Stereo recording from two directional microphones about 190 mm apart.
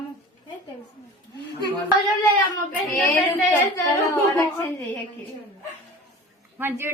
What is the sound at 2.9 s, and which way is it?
A woman's voice, 10° left (ahead or behind).